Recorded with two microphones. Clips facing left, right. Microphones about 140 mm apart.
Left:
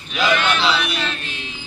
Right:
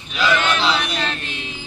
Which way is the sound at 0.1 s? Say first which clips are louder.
Even; 15° left (ahead or behind).